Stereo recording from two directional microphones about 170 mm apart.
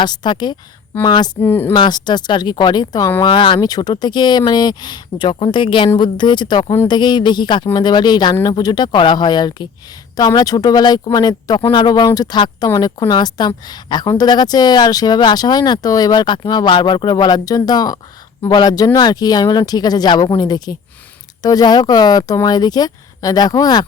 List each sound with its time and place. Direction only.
0.0 s speech: 25° left (ahead or behind)
1.4 s speech: 10° left (ahead or behind)
1.7 s speech: 25° left (ahead or behind)